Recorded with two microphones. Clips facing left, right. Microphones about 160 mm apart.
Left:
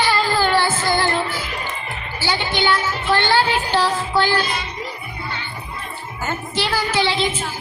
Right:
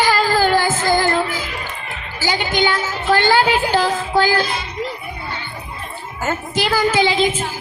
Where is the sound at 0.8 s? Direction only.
45° right (ahead or behind).